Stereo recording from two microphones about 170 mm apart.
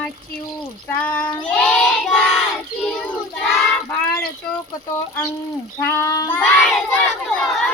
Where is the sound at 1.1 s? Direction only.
25° left (ahead or behind).